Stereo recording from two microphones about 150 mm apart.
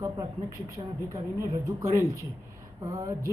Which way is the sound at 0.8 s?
30° right (ahead or behind).